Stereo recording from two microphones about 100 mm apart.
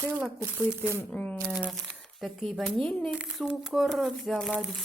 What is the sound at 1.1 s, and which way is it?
Speech, 15° left (ahead or behind).